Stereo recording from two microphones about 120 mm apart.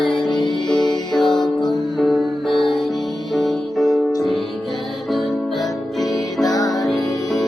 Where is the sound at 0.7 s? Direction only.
35° left (ahead or behind).